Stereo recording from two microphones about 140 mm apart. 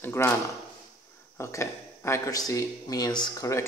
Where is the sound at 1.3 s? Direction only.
20° left (ahead or behind).